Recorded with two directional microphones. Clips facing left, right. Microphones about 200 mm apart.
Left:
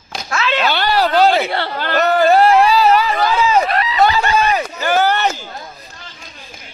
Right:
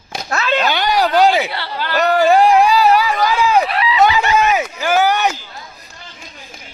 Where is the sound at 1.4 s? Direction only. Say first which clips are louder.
Left 3 dB; 50° left (ahead or behind).